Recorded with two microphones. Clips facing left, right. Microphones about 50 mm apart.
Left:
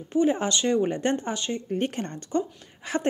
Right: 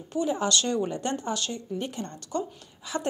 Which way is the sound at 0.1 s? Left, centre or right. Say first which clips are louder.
Left 4 dB; left.